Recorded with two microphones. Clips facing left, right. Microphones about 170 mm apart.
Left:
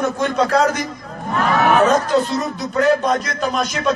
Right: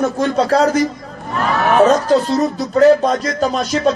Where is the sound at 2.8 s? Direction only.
35° right (ahead or behind).